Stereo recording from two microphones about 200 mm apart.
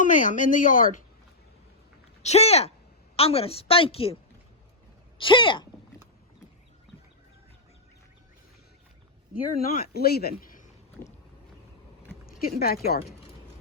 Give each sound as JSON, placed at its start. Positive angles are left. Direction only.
{"t": 0.0, "sound": "a woman's voice", "side_deg": 40}
{"t": 2.2, "sound": "a woman's voice", "side_deg": 30}
{"t": 9.6, "sound": "speech", "side_deg": 50}
{"t": 12.2, "sound": "speech", "side_deg": 50}